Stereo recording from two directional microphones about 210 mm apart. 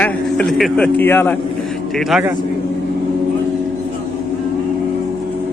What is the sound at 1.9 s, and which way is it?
Speech, 5° right (ahead or behind).